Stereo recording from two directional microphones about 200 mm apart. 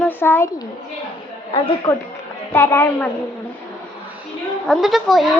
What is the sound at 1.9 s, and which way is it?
A woman's voice, 15° left (ahead or behind).